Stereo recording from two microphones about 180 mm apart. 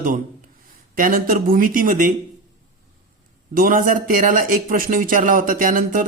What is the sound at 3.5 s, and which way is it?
Speech, 50° right (ahead or behind).